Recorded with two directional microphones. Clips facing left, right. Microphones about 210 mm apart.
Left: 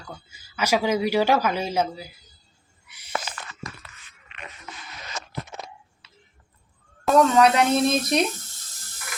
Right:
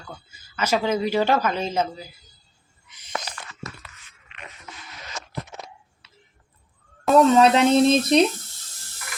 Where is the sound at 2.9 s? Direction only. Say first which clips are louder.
Left 1 dB; 10° left (ahead or behind).